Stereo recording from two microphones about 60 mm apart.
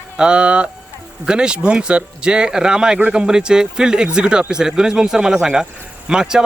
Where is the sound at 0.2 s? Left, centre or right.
Centre.